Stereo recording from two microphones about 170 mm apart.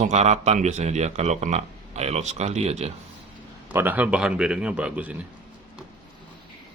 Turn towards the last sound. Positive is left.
turn(degrees=-10)  # may be behind; listen again after turning